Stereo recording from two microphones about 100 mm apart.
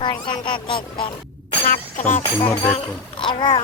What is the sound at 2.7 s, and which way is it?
Speech, 55° left (ahead or behind).